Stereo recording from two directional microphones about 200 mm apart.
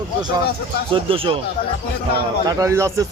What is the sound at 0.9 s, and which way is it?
Speech, 25° right (ahead or behind).